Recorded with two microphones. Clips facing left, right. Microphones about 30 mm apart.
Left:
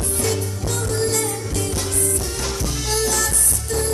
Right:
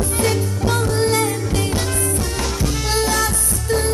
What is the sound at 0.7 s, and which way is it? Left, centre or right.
Music, right.